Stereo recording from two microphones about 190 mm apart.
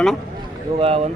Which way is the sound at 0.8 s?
30° right (ahead or behind).